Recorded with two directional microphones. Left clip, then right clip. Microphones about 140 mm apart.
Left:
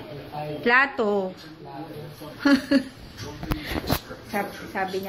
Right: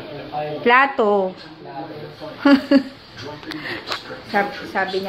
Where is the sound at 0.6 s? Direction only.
10° right (ahead or behind).